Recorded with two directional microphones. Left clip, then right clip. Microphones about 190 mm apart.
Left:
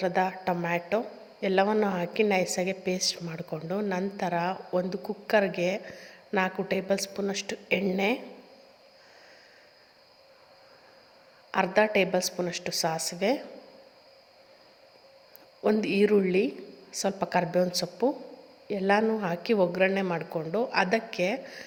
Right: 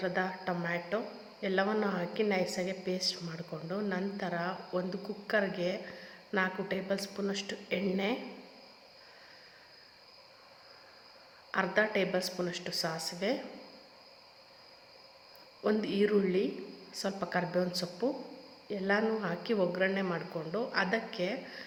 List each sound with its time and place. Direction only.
0.0 s a woman's voice: 35° left (ahead or behind)
11.5 s a woman's voice: 35° left (ahead or behind)
15.6 s a woman's voice: 35° left (ahead or behind)